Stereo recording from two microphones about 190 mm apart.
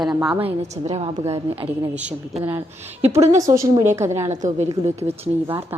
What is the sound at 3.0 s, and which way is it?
Speech, 35° right (ahead or behind).